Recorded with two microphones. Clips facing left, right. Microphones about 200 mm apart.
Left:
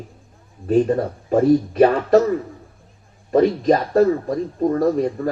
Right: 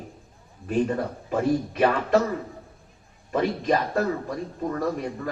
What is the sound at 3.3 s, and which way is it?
A man's voice, 40° left (ahead or behind).